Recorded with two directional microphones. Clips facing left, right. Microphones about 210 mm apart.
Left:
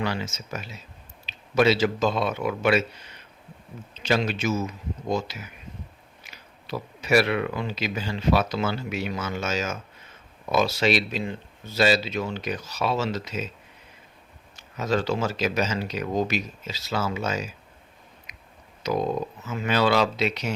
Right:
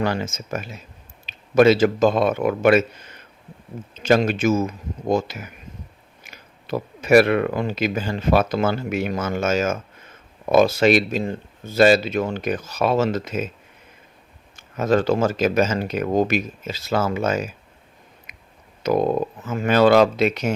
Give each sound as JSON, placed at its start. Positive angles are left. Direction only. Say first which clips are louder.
{"t": 0.0, "sound": "speech", "louder": "right 5 dB", "side_deg": -50}
{"t": 14.5, "sound": "speech", "louder": "right 6 dB", "side_deg": -50}
{"t": 18.3, "sound": "a sound", "louder": "right 1 dB", "side_deg": -55}
{"t": 18.8, "sound": "speech", "louder": "right 6 dB", "side_deg": -55}